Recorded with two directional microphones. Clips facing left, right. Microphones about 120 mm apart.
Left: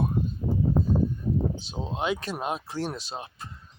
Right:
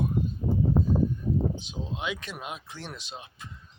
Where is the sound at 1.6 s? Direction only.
35° left (ahead or behind).